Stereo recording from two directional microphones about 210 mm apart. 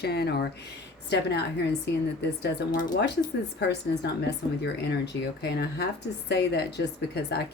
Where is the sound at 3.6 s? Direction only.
55° left (ahead or behind).